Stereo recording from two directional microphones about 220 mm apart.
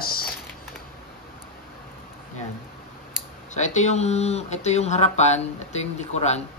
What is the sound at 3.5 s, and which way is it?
Speech, 35° left (ahead or behind).